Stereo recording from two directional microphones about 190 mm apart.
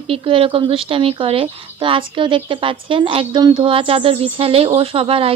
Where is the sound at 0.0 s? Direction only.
30° right (ahead or behind).